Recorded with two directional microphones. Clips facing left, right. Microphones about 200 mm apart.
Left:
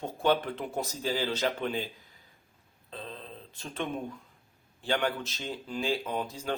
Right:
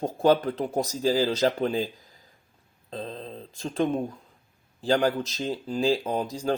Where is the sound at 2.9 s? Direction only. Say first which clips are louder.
Right 7 dB; 40° right (ahead or behind).